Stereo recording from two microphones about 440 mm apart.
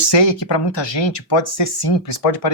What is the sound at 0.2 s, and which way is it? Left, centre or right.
Speech, left.